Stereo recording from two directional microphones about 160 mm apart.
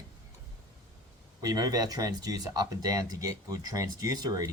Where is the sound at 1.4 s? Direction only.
20° right (ahead or behind).